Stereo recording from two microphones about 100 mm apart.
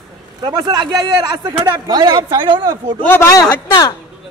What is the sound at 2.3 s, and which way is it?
Speech, 55° right (ahead or behind).